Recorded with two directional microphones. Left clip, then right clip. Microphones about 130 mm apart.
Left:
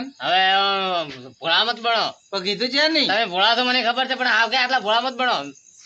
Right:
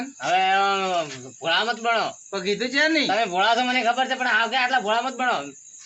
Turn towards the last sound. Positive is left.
turn(degrees=35)  # may be behind; listen again after turning